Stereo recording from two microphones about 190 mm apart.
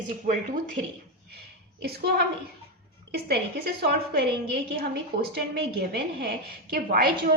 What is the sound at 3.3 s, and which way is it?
A woman's voice, 55° right (ahead or behind).